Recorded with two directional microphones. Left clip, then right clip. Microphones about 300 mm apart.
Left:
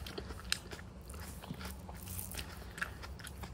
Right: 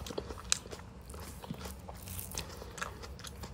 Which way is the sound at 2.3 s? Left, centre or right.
Centre.